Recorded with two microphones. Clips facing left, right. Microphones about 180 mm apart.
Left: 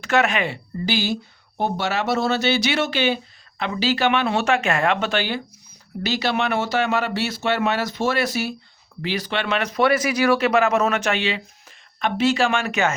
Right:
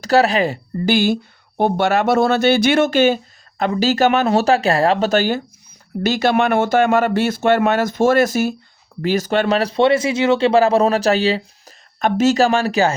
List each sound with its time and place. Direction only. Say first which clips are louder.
0.0 s speech: right 6 dB; 35° right (ahead or behind)